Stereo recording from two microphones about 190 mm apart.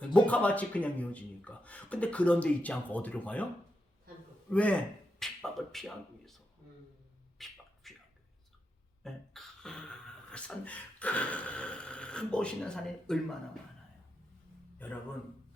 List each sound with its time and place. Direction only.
0.0 s speech: 5° left (ahead or behind)
7.3 s beatboxing: centre (ahead or behind)
9.0 s speech: centre (ahead or behind)